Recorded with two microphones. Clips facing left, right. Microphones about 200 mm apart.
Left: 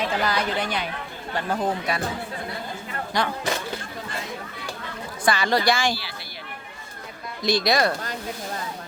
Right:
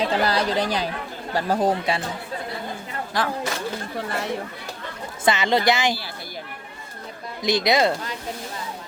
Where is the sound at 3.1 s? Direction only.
Centre (ahead or behind).